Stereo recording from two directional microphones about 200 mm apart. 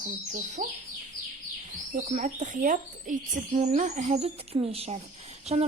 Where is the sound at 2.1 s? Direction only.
40° right (ahead or behind).